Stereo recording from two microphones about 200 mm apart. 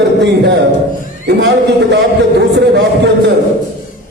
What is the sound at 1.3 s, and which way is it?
A man's voice, 60° right (ahead or behind).